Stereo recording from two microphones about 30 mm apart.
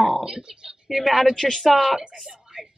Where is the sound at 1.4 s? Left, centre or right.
Centre.